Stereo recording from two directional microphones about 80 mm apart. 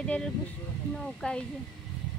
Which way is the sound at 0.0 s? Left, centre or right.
Centre.